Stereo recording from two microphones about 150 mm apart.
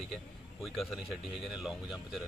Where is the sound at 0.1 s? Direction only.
Centre (ahead or behind).